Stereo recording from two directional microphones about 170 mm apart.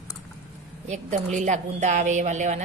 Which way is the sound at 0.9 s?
45° right (ahead or behind).